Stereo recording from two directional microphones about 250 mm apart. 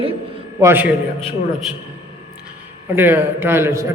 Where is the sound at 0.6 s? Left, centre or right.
Centre.